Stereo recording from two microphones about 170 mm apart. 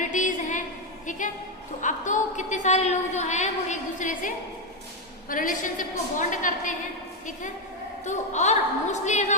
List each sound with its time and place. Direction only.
0.0 s a sound: 50° left (ahead or behind)
1.8 s a woman's voice: 45° left (ahead or behind)
5.3 s a woman's voice: 55° left (ahead or behind)
8.0 s a woman's voice: 45° left (ahead or behind)